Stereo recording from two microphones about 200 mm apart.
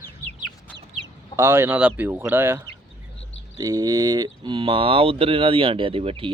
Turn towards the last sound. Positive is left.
turn(degrees=-30)  # may be behind; listen again after turning